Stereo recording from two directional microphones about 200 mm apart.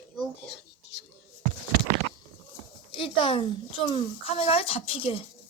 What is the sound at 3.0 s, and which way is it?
Speech, 25° left (ahead or behind).